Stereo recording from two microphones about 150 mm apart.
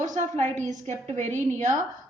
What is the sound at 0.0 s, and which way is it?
A woman's voice, 55° right (ahead or behind).